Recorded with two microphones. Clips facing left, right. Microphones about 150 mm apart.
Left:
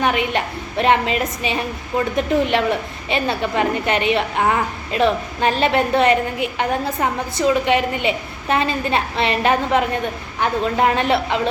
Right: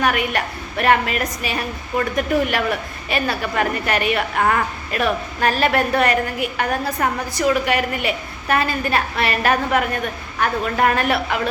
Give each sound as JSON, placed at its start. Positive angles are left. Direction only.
{"t": 0.0, "sound": "a woman's voice", "side_deg": 20}